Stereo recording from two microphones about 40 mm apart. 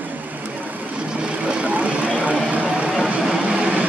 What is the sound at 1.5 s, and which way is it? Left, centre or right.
Vehicle, right.